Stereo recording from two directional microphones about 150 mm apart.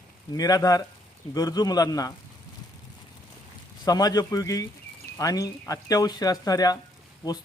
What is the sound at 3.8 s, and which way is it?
Speech, 25° left (ahead or behind).